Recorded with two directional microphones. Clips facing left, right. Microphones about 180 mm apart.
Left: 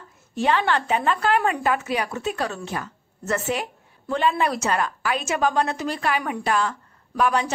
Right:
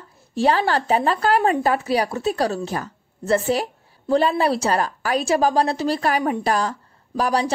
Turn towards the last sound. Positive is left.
turn(degrees=-35)  # may be behind; listen again after turning